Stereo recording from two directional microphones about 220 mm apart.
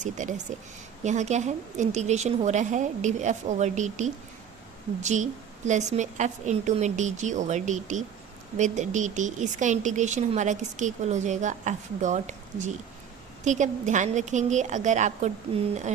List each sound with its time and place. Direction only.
0.0 s speech: 35° right (ahead or behind)